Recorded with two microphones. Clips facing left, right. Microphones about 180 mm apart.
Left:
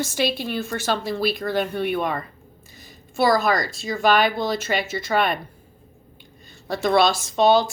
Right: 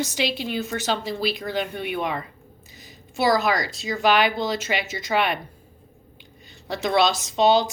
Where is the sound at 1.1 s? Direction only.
55° left (ahead or behind).